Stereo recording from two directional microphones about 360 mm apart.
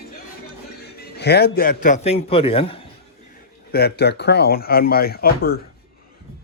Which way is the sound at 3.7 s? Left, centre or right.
Left.